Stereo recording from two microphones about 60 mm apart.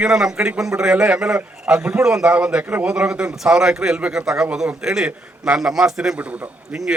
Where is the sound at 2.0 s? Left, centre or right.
Centre.